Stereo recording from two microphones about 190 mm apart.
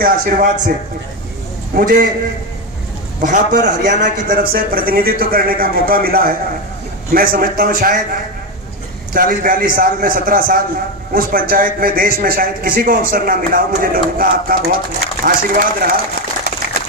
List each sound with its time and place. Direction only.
0.0 s a man's voice: 45° right (ahead or behind)
1.7 s a man's voice: 45° right (ahead or behind)
3.2 s a man's voice: 40° right (ahead or behind)
9.1 s a man's voice: 45° right (ahead or behind)